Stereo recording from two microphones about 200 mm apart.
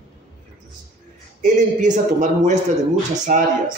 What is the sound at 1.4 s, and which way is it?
A man's voice, 40° right (ahead or behind).